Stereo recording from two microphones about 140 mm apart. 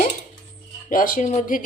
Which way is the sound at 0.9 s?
75° left (ahead or behind).